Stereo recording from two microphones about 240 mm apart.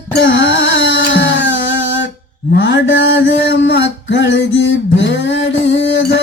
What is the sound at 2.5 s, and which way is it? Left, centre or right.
Mantra, left.